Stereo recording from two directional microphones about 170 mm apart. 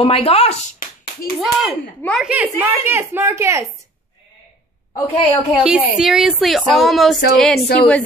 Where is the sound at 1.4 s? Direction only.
5° right (ahead or behind).